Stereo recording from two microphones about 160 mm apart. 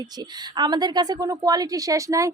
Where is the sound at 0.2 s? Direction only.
25° right (ahead or behind).